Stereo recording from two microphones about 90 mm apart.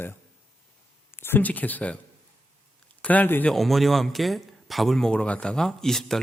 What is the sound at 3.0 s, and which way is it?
Speech, 20° left (ahead or behind).